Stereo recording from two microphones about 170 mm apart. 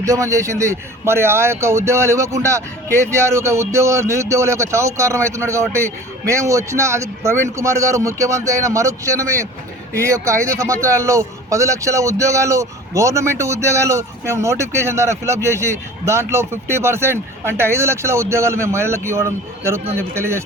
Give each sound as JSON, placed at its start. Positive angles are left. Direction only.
{"t": 0.0, "sound": "a man's voice", "side_deg": -20}